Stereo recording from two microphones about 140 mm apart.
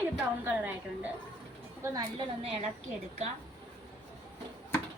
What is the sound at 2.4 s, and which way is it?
Speech, 45° right (ahead or behind).